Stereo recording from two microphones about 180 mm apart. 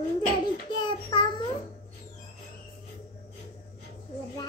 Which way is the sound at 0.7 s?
25° left (ahead or behind).